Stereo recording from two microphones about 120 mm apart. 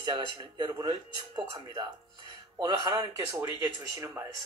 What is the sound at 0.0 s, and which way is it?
Speech, 35° right (ahead or behind).